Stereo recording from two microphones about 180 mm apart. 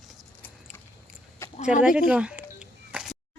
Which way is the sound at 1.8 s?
5° right (ahead or behind).